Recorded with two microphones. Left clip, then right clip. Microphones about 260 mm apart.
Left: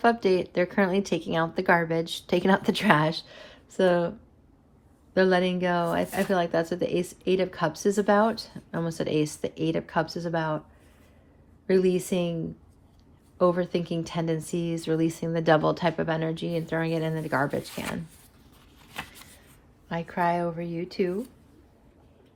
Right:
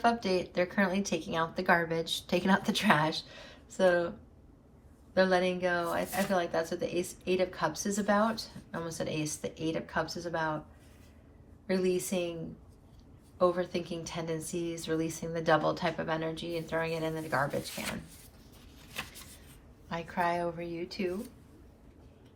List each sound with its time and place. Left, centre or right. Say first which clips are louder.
0.0 s speech: left 6 dB; left
5.1 s speech: left 4 dB; left
11.6 s speech: left 7 dB; left
13.4 s speech: left 5 dB; left
18.8 s a sound: left 3 dB; centre
19.9 s speech: left 5 dB; left